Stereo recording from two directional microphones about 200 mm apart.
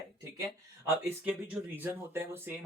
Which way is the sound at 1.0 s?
10° right (ahead or behind).